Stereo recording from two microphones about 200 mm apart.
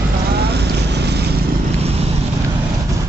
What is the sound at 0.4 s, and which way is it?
Boat, 55° right (ahead or behind).